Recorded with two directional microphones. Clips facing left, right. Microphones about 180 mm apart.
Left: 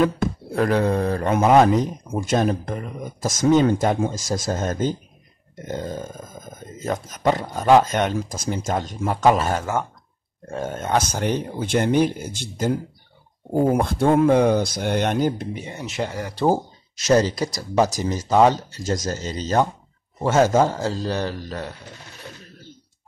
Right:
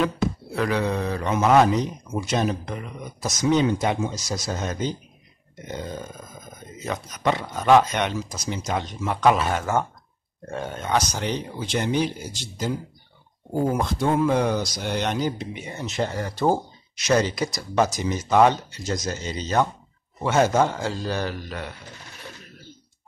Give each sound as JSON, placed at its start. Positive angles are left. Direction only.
{"t": 0.0, "sound": "a man's voice", "side_deg": 50}
{"t": 13.7, "sound": "speech", "side_deg": 55}
{"t": 15.7, "sound": "speech", "side_deg": 10}
{"t": 17.0, "sound": "a man's voice", "side_deg": 40}